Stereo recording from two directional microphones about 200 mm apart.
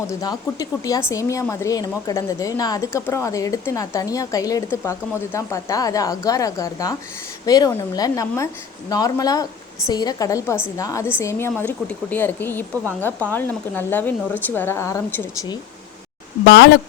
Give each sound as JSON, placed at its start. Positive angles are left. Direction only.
{"t": 0.1, "sound": "a woman's voice", "side_deg": 20}
{"t": 16.4, "sound": "speech", "side_deg": 60}